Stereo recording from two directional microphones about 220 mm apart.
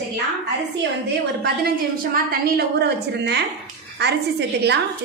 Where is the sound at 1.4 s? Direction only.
45° right (ahead or behind).